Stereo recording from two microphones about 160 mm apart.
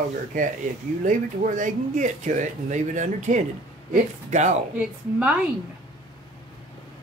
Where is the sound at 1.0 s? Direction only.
55° right (ahead or behind).